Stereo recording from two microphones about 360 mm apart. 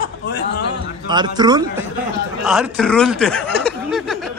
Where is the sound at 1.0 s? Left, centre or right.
Centre.